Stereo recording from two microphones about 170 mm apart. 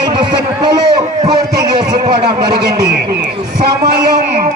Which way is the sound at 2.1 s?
70° right (ahead or behind).